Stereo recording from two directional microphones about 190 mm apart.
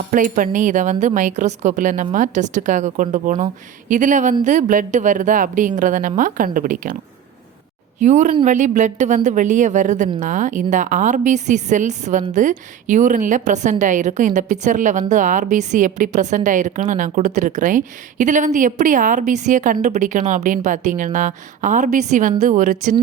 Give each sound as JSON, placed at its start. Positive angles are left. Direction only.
{"t": 0.1, "sound": "a woman's voice", "side_deg": -45}
{"t": 8.0, "sound": "a woman's voice", "side_deg": -40}